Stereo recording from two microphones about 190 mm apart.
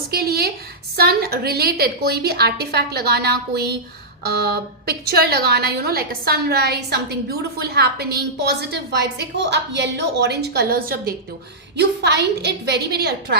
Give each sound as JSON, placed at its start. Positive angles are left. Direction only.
{"t": 0.1, "sound": "a woman's voice", "side_deg": -55}
{"t": 11.8, "sound": "a woman's voice", "side_deg": -65}